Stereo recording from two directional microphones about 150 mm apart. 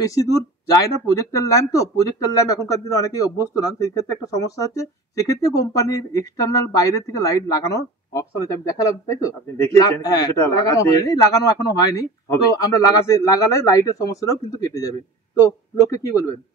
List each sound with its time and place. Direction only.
0.0 s a man's voice: 20° left (ahead or behind)